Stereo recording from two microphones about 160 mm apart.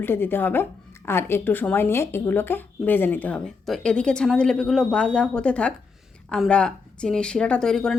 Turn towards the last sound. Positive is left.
turn(degrees=5)  # may be behind; listen again after turning